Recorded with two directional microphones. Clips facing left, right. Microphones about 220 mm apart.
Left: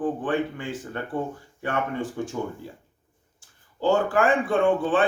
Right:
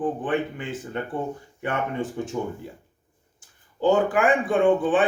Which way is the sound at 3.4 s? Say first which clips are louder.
Right 2 dB; 15° right (ahead or behind).